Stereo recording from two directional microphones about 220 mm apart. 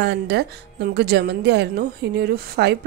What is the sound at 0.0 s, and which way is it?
A woman's voice, 50° right (ahead or behind).